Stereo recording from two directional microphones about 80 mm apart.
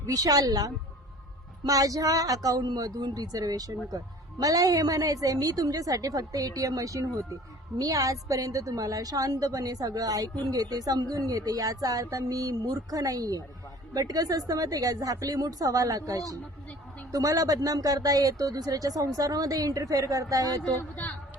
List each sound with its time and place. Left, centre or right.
0.0 s a woman's voice: right